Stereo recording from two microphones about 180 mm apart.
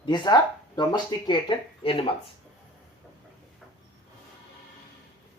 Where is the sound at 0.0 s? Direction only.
25° left (ahead or behind).